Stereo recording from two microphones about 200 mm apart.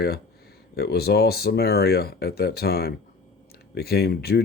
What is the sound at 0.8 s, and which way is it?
Speech, 50° left (ahead or behind).